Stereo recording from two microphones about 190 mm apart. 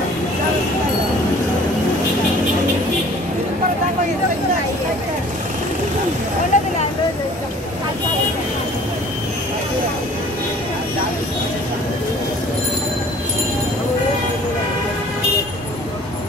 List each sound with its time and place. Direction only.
6.5 s vehicle: 40° left (ahead or behind)